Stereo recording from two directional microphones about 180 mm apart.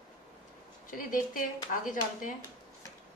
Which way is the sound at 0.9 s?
50° left (ahead or behind).